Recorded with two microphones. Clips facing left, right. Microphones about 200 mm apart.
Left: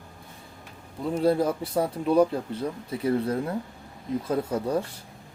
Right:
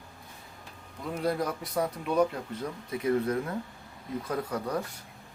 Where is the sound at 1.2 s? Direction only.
30° left (ahead or behind).